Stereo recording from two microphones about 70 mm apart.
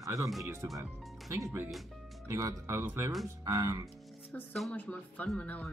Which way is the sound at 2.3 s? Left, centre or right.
Right.